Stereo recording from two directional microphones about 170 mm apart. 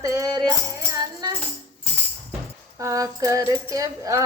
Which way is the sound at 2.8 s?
20° right (ahead or behind).